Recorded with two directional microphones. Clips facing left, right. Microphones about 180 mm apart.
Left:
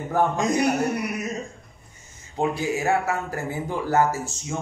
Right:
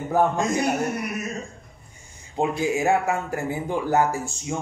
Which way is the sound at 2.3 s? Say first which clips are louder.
Right 1 dB; 15° right (ahead or behind).